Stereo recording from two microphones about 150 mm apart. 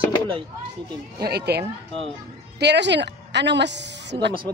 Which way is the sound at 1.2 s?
90° right.